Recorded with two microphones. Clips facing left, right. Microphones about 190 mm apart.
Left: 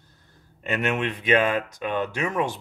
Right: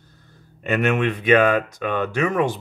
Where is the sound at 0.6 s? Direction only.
55° right (ahead or behind).